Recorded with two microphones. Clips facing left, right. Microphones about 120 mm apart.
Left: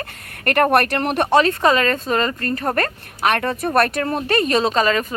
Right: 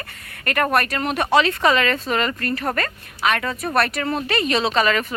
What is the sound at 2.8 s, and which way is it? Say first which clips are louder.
Speech: left 3 dB; 50° left (ahead or behind).